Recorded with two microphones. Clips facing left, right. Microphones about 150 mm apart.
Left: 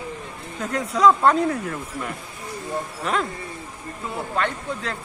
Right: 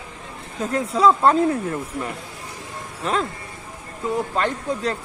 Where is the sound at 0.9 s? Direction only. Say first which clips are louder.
Even; 30° right (ahead or behind).